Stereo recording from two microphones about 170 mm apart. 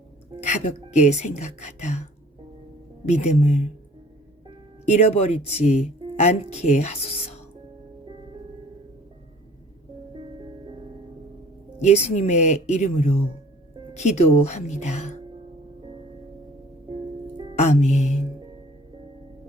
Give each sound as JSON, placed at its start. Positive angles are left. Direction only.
{"t": 0.3, "sound": "speech", "side_deg": 45}
{"t": 3.1, "sound": "speech", "side_deg": 40}
{"t": 4.9, "sound": "speech", "side_deg": 40}
{"t": 11.8, "sound": "speech", "side_deg": 40}
{"t": 17.6, "sound": "speech", "side_deg": 45}